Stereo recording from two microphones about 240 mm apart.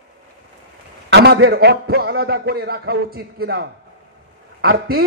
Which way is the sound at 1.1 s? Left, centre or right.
Right.